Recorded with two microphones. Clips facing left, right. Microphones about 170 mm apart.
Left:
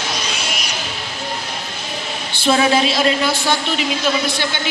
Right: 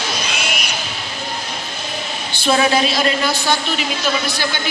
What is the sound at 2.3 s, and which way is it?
Speech, 25° left (ahead or behind).